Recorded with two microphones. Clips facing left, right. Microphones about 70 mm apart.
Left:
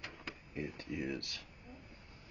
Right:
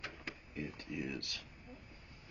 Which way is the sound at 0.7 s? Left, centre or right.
Left.